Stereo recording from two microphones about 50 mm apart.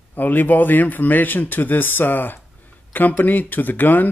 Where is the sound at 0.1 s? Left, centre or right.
Left.